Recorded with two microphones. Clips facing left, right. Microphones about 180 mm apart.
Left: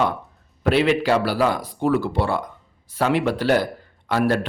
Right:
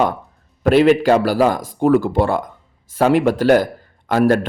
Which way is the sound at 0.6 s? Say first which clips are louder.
Right 6 dB; 45° right (ahead or behind).